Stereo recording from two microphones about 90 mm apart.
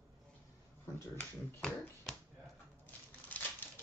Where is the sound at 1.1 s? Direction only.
10° left (ahead or behind).